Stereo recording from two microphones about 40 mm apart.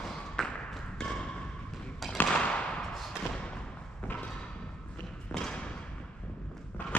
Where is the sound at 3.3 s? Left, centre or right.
Left.